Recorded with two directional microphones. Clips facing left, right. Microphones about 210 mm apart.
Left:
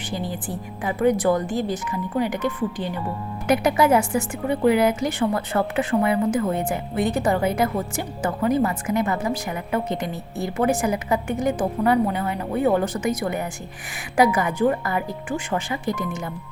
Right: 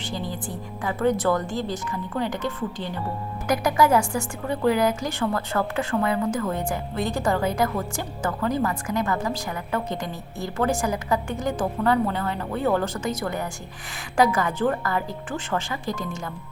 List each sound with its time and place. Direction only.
0.4 s a woman's voice: 20° left (ahead or behind)